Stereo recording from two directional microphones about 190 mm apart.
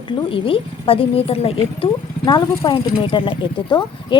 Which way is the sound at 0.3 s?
30° left (ahead or behind).